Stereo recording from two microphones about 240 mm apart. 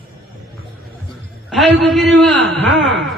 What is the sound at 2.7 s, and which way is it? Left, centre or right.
Speech, right.